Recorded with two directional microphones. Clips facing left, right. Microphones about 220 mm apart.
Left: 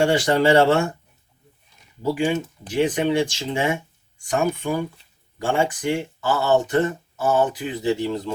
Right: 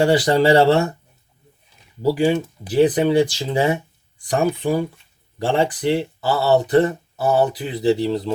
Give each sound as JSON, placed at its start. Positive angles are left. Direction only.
{"t": 0.0, "sound": "speech", "side_deg": -35}
{"t": 2.0, "sound": "speech", "side_deg": -35}